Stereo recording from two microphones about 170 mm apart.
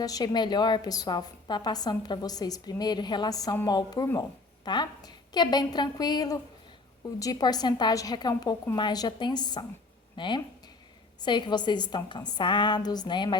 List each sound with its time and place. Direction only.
0.0 s a woman's voice: 20° left (ahead or behind)